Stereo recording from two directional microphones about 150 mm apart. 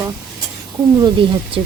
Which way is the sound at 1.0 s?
35° right (ahead or behind).